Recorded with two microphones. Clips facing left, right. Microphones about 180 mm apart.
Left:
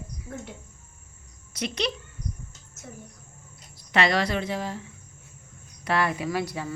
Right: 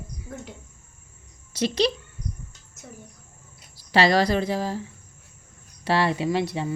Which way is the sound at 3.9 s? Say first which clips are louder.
Right 4 dB; 35° right (ahead or behind).